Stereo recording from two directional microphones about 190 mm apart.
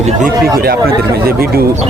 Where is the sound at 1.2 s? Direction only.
50° right (ahead or behind).